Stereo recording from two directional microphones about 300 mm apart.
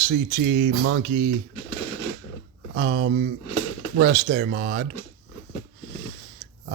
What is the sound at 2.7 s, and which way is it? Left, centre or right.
Speech, right.